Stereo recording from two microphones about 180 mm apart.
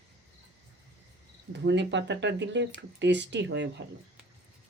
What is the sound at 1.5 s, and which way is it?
Speech, 75° right (ahead or behind).